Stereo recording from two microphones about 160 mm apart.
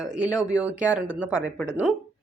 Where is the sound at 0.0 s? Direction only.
5° right (ahead or behind).